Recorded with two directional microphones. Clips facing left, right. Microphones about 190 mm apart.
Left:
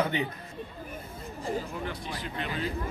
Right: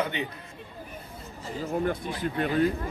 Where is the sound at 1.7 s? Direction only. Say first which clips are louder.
Right 8 dB; 50° right (ahead or behind).